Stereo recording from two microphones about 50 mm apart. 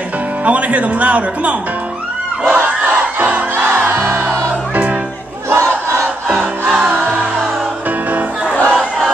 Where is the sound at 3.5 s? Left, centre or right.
Right.